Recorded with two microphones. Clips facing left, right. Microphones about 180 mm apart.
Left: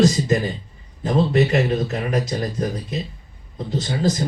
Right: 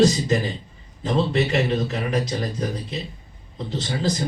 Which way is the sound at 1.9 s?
45° left (ahead or behind).